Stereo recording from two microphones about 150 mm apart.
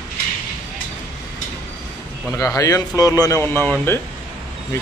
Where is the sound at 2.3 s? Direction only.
20° left (ahead or behind).